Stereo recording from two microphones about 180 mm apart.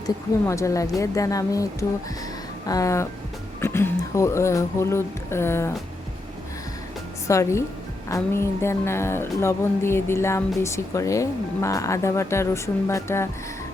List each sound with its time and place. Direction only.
0.4 s music: 15° left (ahead or behind)
3.6 s speech: 15° left (ahead or behind)
7.3 s music: 15° left (ahead or behind)